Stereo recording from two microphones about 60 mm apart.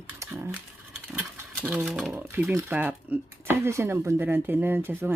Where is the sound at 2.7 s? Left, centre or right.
Right.